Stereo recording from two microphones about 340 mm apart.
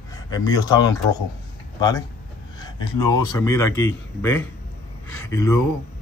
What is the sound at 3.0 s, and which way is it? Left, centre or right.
Speech, left.